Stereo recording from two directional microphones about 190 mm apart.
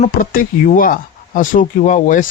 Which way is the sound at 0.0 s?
45° left (ahead or behind).